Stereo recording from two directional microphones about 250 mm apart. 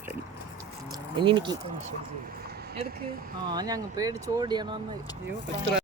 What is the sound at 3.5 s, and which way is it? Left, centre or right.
Speech, centre.